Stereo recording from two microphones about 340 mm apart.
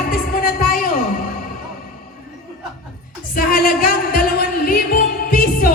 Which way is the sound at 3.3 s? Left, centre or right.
Left.